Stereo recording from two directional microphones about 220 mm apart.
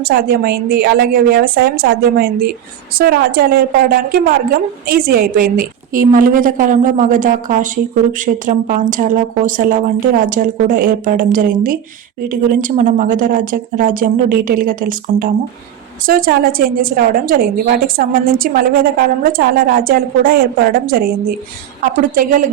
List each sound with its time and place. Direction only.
0.0 s a woman's voice: 45° right (ahead or behind)